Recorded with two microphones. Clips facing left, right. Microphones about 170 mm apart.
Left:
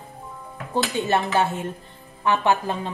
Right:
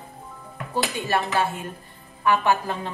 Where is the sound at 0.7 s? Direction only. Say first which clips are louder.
Left 3 dB; 20° left (ahead or behind).